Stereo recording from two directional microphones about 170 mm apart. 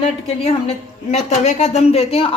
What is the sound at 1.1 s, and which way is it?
Speech, 45° left (ahead or behind).